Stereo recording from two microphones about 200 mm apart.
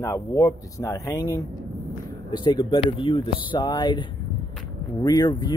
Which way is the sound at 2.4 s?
25° left (ahead or behind).